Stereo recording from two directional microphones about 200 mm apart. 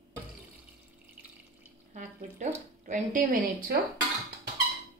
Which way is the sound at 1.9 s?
40° right (ahead or behind).